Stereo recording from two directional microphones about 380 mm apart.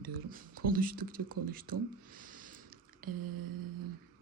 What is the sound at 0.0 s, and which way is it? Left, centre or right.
Speech, right.